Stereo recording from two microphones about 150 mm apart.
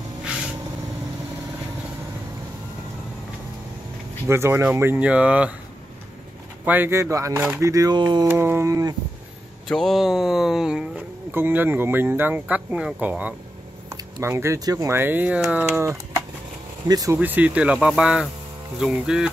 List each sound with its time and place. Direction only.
4.3 s speech: 15° right (ahead or behind)
6.6 s speech: 15° right (ahead or behind); by 8.3 s 30° right (ahead or behind)
8.3 s speech: 15° right (ahead or behind)
9.7 s speech: centre (ahead or behind); by 17.2 s 25° right (ahead or behind)
17.2 s speech: 10° right (ahead or behind)